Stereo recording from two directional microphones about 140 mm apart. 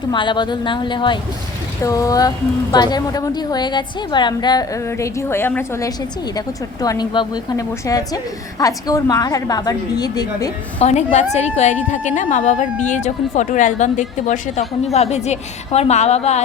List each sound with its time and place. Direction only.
0.1 s a woman's voice: 35° left (ahead or behind)
1.8 s a woman's voice: 25° left (ahead or behind)
6.8 s a woman's voice: 30° left (ahead or behind)
10.8 s a woman's voice: 55° left (ahead or behind)
14.9 s a woman's voice: 50° left (ahead or behind)